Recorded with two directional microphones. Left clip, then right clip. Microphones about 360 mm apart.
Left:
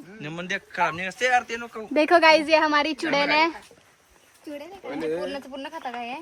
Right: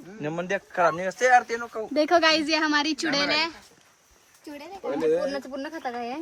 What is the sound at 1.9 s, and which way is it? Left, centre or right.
Speech, centre.